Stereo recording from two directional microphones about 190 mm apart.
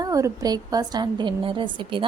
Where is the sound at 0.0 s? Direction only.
20° right (ahead or behind).